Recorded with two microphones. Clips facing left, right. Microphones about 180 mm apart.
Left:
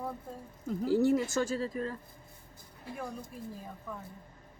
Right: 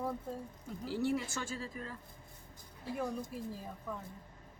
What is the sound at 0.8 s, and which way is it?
Speech, 45° left (ahead or behind).